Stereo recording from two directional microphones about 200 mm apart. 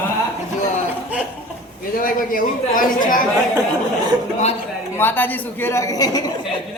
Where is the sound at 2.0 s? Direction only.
45° left (ahead or behind).